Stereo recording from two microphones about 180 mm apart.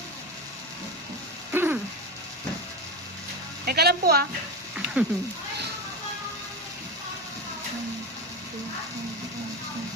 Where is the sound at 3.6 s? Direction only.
60° right (ahead or behind).